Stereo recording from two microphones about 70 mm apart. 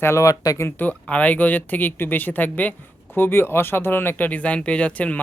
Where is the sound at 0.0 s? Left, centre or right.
Left.